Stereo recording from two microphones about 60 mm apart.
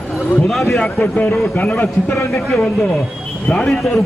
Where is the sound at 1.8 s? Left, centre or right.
Left.